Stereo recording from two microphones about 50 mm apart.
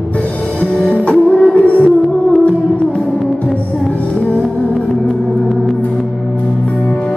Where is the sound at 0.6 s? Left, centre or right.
Left.